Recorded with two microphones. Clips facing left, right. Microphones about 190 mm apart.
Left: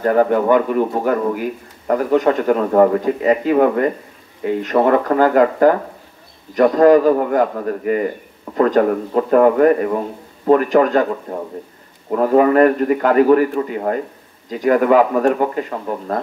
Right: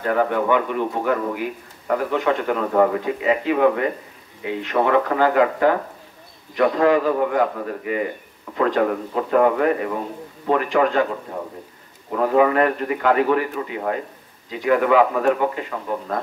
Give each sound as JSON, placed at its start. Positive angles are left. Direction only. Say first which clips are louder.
{"t": 0.0, "sound": "a man's voice", "louder": "left 6 dB", "side_deg": 40}
{"t": 12.1, "sound": "a man's voice", "louder": "left 4 dB", "side_deg": 45}